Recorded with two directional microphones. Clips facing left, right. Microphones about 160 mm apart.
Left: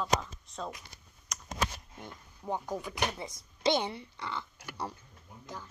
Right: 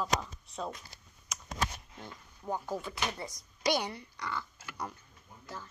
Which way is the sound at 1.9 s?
10° left (ahead or behind).